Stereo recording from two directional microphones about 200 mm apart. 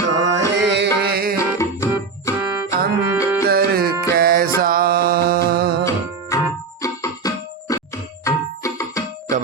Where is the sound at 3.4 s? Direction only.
50° right (ahead or behind).